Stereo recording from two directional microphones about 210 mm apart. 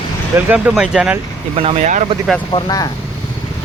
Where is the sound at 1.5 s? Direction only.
30° right (ahead or behind).